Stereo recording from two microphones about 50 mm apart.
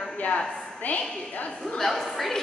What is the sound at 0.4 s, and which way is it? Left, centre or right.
Speech, centre.